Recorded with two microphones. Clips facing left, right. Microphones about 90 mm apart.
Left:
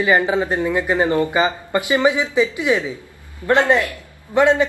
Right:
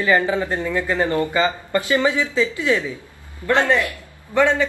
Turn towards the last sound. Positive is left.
turn(degrees=20)  # may be behind; listen again after turning